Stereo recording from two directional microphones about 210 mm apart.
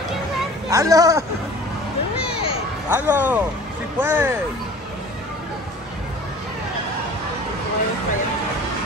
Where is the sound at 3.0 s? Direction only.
10° right (ahead or behind).